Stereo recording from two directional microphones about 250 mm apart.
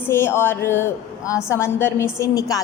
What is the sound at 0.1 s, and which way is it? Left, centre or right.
A woman's voice, centre.